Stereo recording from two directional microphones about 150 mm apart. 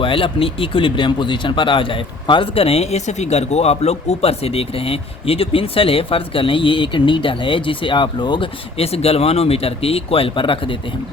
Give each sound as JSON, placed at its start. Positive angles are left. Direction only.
{"t": 0.0, "sound": "speech", "side_deg": 35}